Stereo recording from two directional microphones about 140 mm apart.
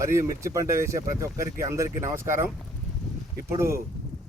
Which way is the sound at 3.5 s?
20° right (ahead or behind).